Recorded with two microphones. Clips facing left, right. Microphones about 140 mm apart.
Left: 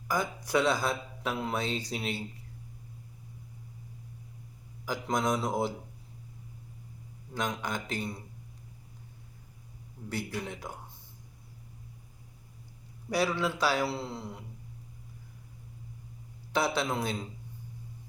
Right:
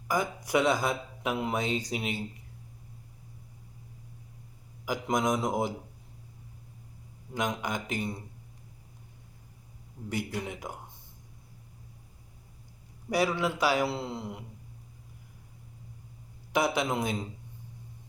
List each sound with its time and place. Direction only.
0.1 s speech: 15° right (ahead or behind)
4.9 s speech: 15° right (ahead or behind)
7.3 s speech: 15° right (ahead or behind)
10.1 s speech: 15° right (ahead or behind)
13.1 s speech: 15° right (ahead or behind)
16.5 s speech: 15° right (ahead or behind)